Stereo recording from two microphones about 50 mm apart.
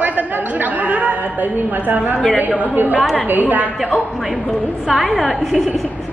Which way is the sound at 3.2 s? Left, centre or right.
Right.